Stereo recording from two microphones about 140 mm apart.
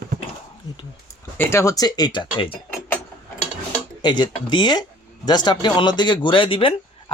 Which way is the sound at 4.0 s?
35° left (ahead or behind).